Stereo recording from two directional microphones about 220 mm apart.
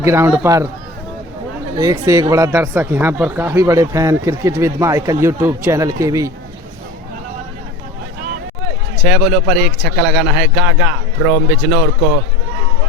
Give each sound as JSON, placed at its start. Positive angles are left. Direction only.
{"t": 0.0, "sound": "speech", "side_deg": -10}
{"t": 1.8, "sound": "speech", "side_deg": -15}
{"t": 9.0, "sound": "a man's voice", "side_deg": -5}